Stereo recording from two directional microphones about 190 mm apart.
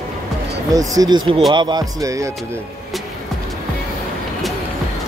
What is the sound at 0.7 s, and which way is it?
Music, 20° right (ahead or behind).